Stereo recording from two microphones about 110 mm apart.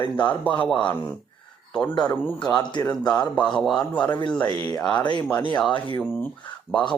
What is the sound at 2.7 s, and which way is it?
Speech, 35° left (ahead or behind).